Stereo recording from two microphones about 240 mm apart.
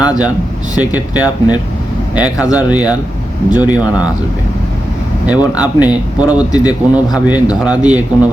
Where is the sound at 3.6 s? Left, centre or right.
Centre.